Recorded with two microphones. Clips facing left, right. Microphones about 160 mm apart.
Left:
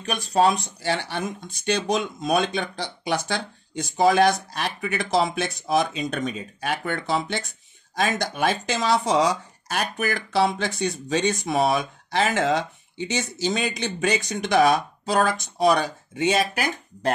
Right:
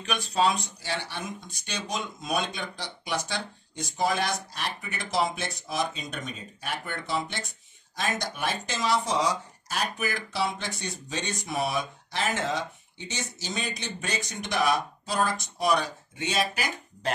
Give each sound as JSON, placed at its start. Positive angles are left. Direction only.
{"t": 0.0, "sound": "speech", "side_deg": 45}
{"t": 1.7, "sound": "speech", "side_deg": 70}